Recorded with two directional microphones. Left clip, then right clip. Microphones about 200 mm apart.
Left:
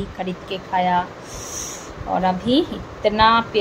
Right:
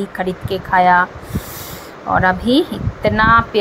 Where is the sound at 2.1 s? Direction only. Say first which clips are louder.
Right 5 dB; 10° right (ahead or behind).